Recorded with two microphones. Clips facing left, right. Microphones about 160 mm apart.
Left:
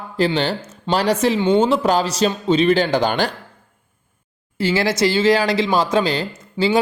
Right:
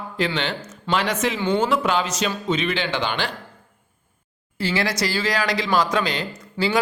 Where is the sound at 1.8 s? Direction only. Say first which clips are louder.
Left 5 dB; 35° left (ahead or behind).